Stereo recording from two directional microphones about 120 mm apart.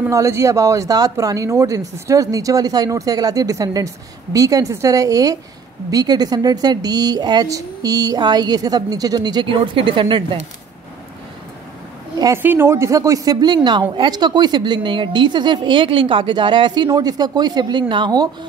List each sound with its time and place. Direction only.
0.1 s a woman's voice: 25° right (ahead or behind); by 10.2 s 45° right (ahead or behind)
12.4 s a woman's voice: 20° right (ahead or behind); by 18.3 s 35° right (ahead or behind)